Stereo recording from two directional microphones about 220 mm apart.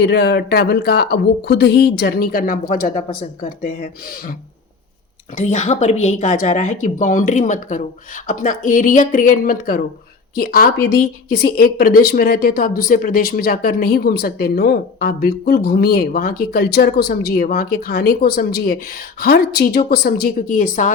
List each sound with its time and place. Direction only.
0.0 s a woman's voice: 50° left (ahead or behind)